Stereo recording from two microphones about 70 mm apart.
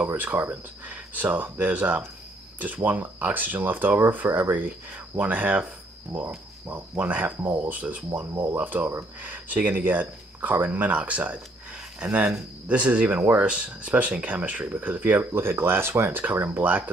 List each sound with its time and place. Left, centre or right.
0.0 s speech: right